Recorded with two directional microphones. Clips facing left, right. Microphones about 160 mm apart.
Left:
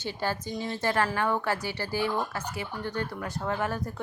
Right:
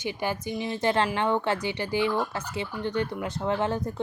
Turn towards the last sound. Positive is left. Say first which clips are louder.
# right 4 dB
turn(degrees=-20)  # may be behind; listen again after turning